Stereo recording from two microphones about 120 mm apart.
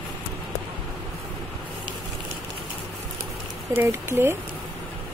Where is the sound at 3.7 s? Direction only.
20° right (ahead or behind).